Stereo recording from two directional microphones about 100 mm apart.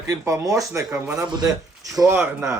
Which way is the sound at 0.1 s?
30° right (ahead or behind).